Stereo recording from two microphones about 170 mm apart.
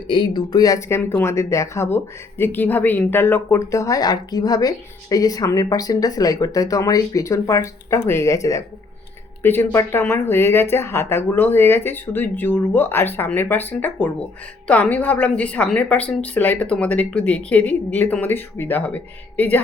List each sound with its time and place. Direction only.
0.1 s a woman's voice: 25° left (ahead or behind); by 19.5 s 10° left (ahead or behind)